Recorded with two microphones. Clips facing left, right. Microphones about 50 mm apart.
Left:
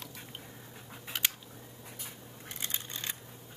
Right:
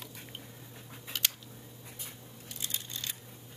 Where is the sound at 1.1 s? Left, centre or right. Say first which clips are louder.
Left 1 dB; centre.